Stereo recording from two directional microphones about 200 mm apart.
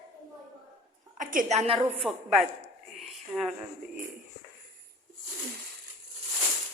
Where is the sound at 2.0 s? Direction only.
Centre (ahead or behind).